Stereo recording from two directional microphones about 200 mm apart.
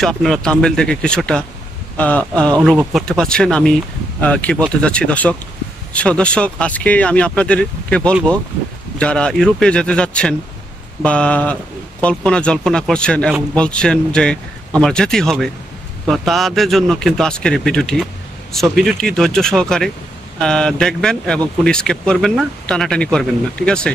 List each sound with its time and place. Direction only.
0.0 s speech: centre (ahead or behind)